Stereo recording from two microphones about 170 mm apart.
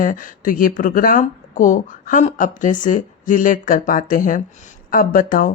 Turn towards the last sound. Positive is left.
turn(degrees=55)  # may be behind; listen again after turning